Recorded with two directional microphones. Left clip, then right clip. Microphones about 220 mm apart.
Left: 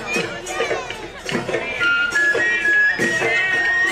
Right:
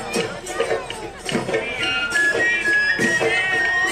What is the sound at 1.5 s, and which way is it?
Music, 55° right (ahead or behind).